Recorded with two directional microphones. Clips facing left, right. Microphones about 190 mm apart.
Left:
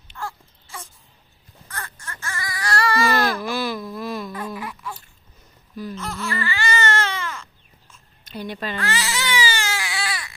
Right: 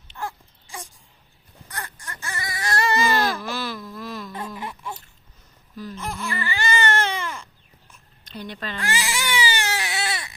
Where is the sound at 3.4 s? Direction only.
15° left (ahead or behind).